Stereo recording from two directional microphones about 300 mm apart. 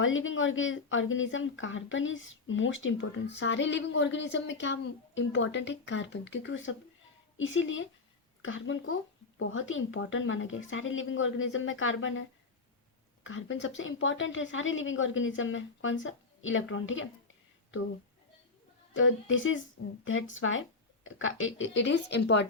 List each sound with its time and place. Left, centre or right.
0.0 s speech: left
13.2 s speech: left
18.9 s speech: left